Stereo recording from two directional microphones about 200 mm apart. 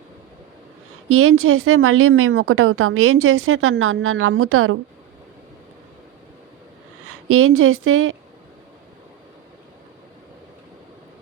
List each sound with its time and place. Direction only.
1.0 s a woman's voice: 90° right
7.3 s a woman's voice: 90° right